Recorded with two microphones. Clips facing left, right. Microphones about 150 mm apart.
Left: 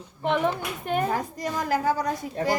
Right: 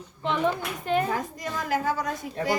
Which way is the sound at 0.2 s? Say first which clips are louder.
Left 1 dB; 55° left (ahead or behind).